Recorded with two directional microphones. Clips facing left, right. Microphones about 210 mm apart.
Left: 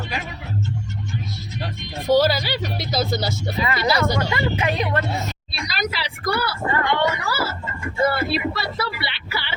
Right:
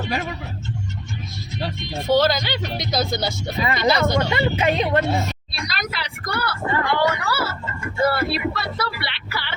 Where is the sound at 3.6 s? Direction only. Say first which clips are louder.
Right 2 dB; 20° right (ahead or behind).